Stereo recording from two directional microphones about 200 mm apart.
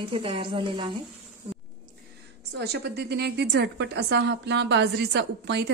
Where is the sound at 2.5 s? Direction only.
55° right (ahead or behind).